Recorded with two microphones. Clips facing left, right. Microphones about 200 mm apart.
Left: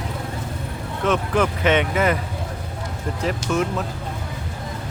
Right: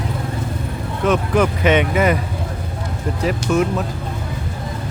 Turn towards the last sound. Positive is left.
turn(degrees=-10)  # may be behind; listen again after turning